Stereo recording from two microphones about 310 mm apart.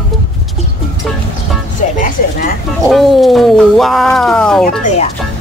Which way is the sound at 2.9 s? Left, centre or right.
Centre.